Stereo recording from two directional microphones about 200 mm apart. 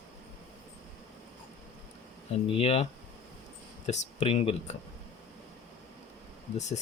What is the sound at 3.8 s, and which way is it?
Speech, 35° left (ahead or behind).